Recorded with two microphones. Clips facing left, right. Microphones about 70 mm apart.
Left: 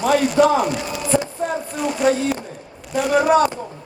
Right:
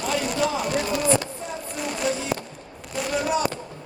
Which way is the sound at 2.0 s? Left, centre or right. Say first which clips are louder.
Left 9 dB; left.